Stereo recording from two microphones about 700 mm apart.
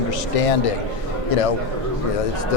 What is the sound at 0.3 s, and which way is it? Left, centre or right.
Speech, left.